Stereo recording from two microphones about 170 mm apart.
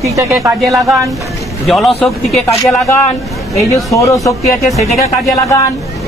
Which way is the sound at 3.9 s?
20° left (ahead or behind).